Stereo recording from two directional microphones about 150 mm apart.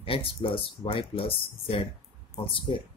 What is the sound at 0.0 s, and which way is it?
Speech, 35° left (ahead or behind).